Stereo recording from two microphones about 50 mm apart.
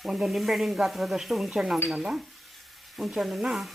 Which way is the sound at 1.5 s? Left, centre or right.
Centre.